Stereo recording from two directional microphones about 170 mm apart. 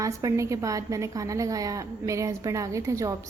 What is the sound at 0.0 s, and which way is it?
A woman's voice, 20° right (ahead or behind).